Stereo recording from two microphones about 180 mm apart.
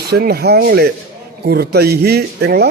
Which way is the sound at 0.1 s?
60° right (ahead or behind).